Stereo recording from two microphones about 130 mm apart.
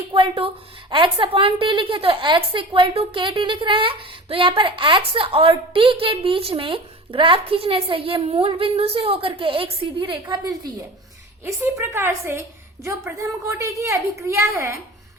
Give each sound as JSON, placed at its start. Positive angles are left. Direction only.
{"t": 0.1, "sound": "a woman's voice", "side_deg": -45}
{"t": 11.4, "sound": "a woman's voice", "side_deg": -20}